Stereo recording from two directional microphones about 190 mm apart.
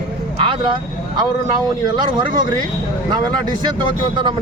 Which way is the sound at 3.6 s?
25° right (ahead or behind).